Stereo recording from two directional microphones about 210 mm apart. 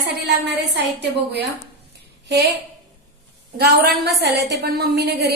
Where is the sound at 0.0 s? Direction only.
55° right (ahead or behind).